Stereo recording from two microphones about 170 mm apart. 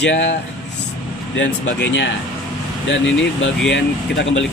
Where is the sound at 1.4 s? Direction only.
90° left.